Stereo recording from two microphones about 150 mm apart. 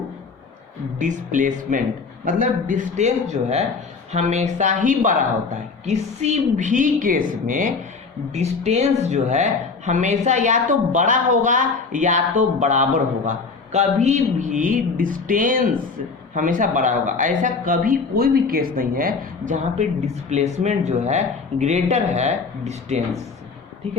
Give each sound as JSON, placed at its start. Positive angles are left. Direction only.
{"t": 0.9, "sound": "speech", "side_deg": -55}
{"t": 5.8, "sound": "speech", "side_deg": -50}
{"t": 8.3, "sound": "speech", "side_deg": -50}
{"t": 20.3, "sound": "speech", "side_deg": -50}